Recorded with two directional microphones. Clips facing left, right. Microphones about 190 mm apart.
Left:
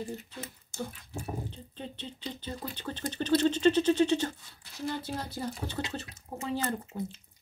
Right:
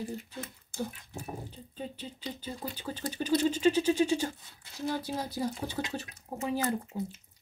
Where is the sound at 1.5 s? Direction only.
5° right (ahead or behind).